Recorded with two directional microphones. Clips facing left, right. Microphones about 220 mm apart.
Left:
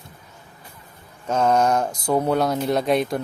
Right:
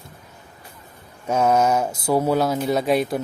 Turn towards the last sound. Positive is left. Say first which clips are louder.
# even
turn(degrees=-5)  # may be behind; listen again after turning